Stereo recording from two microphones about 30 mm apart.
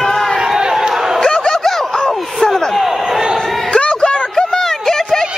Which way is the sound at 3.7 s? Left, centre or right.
Left.